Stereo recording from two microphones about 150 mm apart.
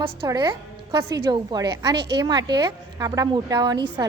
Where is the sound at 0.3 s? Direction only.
30° right (ahead or behind).